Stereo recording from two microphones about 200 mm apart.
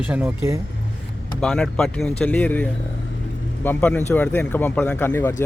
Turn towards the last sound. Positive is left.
turn(degrees=10)  # may be behind; listen again after turning